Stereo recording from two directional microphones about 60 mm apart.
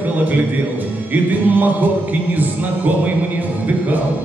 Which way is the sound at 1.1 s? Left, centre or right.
Right.